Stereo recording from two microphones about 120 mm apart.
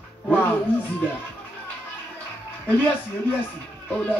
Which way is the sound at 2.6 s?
15° left (ahead or behind).